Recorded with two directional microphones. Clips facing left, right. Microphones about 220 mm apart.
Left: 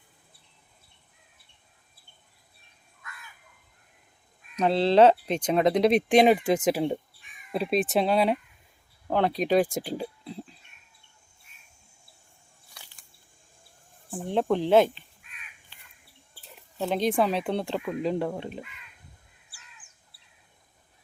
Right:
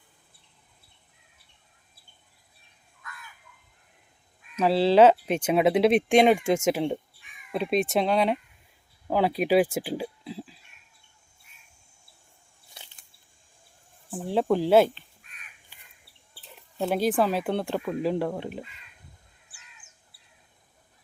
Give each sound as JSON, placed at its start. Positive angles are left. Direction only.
{"t": 4.5, "sound": "speech", "side_deg": -5}
{"t": 12.7, "sound": "a sound", "side_deg": -20}
{"t": 14.1, "sound": "speech", "side_deg": 0}
{"t": 15.7, "sound": "bird", "side_deg": -10}
{"t": 16.4, "sound": "speech", "side_deg": 0}